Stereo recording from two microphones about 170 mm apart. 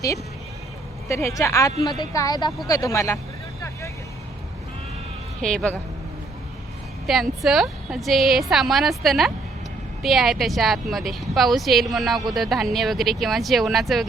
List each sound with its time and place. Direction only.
1.0 s a woman's voice: 15° left (ahead or behind)
5.4 s speech: 5° left (ahead or behind)
7.1 s speech: centre (ahead or behind)